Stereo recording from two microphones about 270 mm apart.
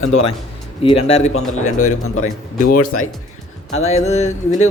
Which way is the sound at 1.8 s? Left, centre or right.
Left.